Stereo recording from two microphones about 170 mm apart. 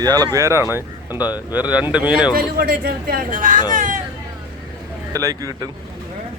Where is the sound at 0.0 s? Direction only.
20° right (ahead or behind); by 2.3 s 5° right (ahead or behind).